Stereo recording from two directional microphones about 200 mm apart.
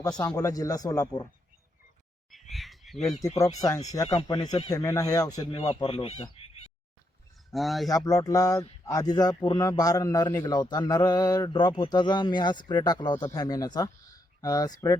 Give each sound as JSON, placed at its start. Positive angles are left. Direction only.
{"t": 0.0, "sound": "speech", "side_deg": 20}
{"t": 2.5, "sound": "frog", "side_deg": 0}
{"t": 3.6, "sound": "a man's voice", "side_deg": 15}
{"t": 7.5, "sound": "speech", "side_deg": 0}
{"t": 7.9, "sound": "a man's voice", "side_deg": 20}